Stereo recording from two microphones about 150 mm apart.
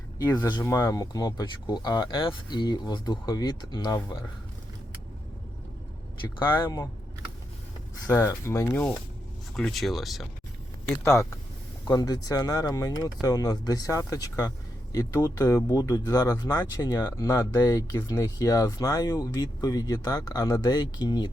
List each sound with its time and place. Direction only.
0.3 s speech: 30° left (ahead or behind)
6.5 s speech: 30° left (ahead or behind)
8.0 s speech: 20° left (ahead or behind)
9.6 s speech: centre (ahead or behind)
11.0 s speech: 20° left (ahead or behind)